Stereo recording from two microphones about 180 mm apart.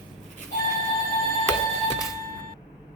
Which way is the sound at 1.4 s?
15° left (ahead or behind).